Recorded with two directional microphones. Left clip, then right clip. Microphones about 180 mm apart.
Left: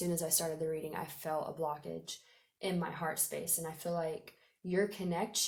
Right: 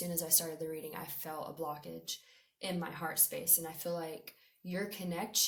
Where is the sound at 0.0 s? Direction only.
45° left (ahead or behind).